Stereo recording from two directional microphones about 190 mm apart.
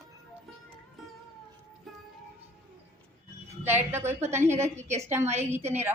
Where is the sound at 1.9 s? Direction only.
Centre (ahead or behind).